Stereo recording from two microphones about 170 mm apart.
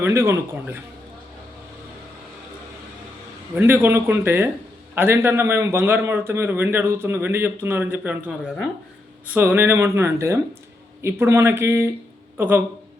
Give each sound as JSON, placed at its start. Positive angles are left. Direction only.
{"t": 0.0, "sound": "a man's voice", "side_deg": -15}
{"t": 3.5, "sound": "a man's voice", "side_deg": -10}